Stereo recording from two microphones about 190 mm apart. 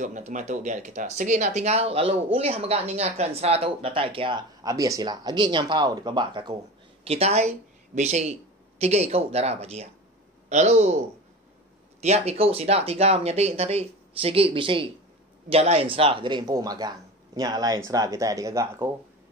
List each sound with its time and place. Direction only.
0.0 s speech: 40° right (ahead or behind); by 18.9 s 15° right (ahead or behind)